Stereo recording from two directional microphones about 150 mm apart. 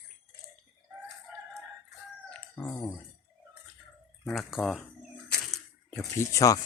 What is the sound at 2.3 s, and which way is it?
Chicken, 10° left (ahead or behind).